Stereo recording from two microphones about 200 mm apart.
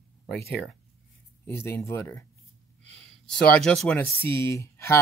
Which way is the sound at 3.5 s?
5° left (ahead or behind).